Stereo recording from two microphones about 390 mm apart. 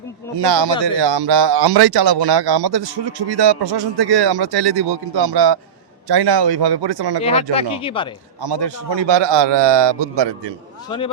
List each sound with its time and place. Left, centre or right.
0.3 s speech: right
7.2 s speech: centre
8.4 s a man's voice: right